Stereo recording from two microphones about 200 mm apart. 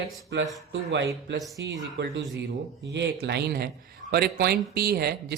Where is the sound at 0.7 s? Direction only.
65° right (ahead or behind).